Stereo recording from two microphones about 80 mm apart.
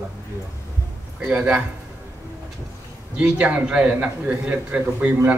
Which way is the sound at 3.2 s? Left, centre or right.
Centre.